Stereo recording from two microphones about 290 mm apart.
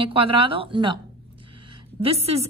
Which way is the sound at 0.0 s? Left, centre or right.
Centre.